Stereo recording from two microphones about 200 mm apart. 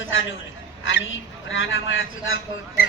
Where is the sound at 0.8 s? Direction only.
65° left (ahead or behind).